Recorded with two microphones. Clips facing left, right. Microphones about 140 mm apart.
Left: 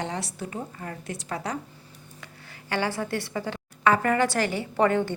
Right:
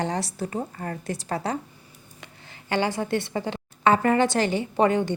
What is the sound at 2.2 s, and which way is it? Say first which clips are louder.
A woman's voice: right 2 dB; 20° right (ahead or behind).